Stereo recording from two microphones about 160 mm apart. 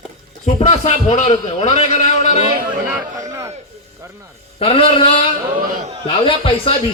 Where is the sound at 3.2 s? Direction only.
20° right (ahead or behind).